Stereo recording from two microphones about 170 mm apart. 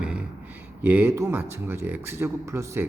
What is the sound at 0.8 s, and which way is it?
Speech, 10° right (ahead or behind).